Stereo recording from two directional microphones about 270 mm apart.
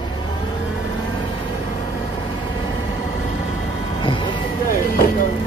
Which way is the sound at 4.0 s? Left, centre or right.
Centre.